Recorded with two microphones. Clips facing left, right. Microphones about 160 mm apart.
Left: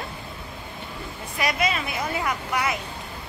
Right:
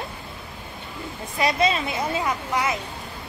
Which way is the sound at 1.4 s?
25° right (ahead or behind).